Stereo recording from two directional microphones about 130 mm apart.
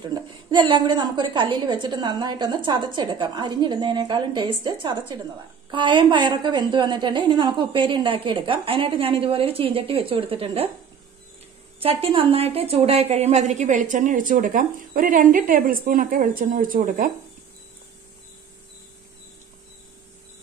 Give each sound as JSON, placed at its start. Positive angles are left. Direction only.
{"t": 0.0, "sound": "a woman's voice", "side_deg": -35}
{"t": 11.8, "sound": "a woman's voice", "side_deg": -45}